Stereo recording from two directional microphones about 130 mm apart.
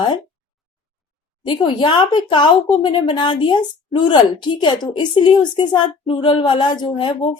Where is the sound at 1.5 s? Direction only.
40° left (ahead or behind).